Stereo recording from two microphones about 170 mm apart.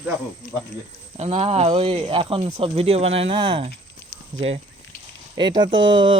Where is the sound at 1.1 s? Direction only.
35° right (ahead or behind).